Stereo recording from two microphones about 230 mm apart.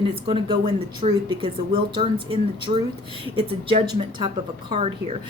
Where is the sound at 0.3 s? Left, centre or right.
Right.